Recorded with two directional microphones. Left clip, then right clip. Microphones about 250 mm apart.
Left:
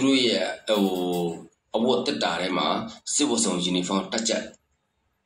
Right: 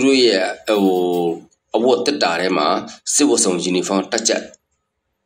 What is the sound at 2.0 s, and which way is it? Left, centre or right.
Speech, right.